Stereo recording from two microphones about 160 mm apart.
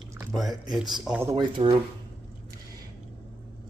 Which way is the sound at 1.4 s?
30° right (ahead or behind).